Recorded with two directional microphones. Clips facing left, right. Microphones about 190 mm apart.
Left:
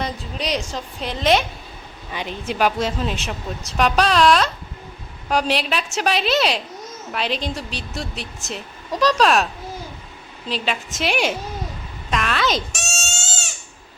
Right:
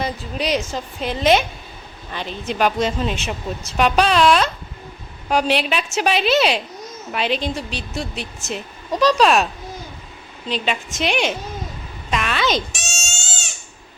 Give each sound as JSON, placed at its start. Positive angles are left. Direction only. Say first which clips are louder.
{"t": 0.0, "sound": "speech", "louder": "right 3 dB", "side_deg": -5}
{"t": 2.0, "sound": "speech", "louder": "even", "side_deg": 10}
{"t": 10.5, "sound": "speech", "louder": "right 2 dB", "side_deg": 5}
{"t": 12.1, "sound": "a sound", "louder": "right 1 dB", "side_deg": 0}